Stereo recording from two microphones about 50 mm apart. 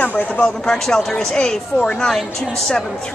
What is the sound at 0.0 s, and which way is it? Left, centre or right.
Speech, left.